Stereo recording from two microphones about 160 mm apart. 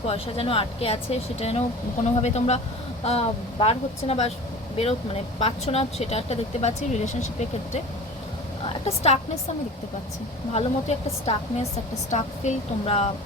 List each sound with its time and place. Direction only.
0.1 s speech: 35° left (ahead or behind)
5.4 s speech: 40° left (ahead or behind)
10.5 s speech: 40° left (ahead or behind)